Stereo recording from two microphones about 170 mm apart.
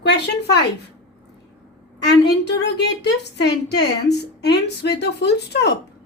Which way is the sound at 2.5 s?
80° left.